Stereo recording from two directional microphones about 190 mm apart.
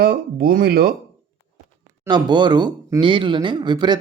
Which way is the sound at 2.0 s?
25° right (ahead or behind).